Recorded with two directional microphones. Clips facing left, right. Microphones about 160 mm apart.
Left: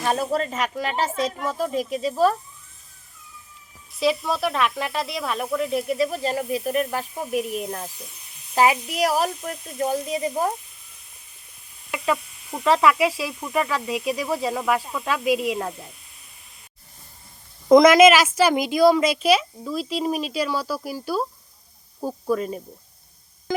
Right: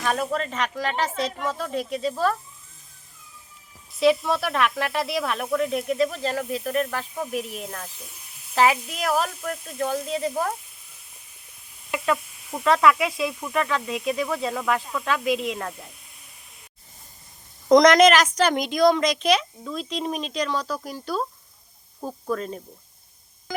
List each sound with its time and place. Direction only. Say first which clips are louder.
0.0 s speech: left 2 dB; 30° left (ahead or behind)
1.6 s speech: left 4 dB; 15° left (ahead or behind)
4.0 s speech: right 2 dB; centre (ahead or behind)
11.9 s speech: even; centre (ahead or behind)
17.7 s speech: left 2 dB; 5° left (ahead or behind)